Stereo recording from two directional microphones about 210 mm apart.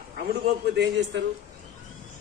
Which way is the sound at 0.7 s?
55° right (ahead or behind).